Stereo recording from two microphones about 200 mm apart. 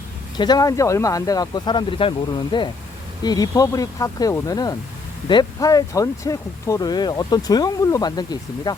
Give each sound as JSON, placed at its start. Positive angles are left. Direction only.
{"t": 0.3, "sound": "speech", "side_deg": 20}